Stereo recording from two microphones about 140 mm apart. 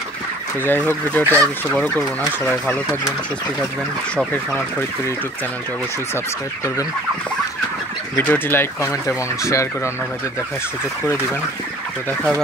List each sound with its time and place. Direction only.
0.7 s speech: 15° left (ahead or behind)
1.2 s fowl: 20° right (ahead or behind)
1.7 s speech: 10° left (ahead or behind)
8.2 s speech: 15° left (ahead or behind)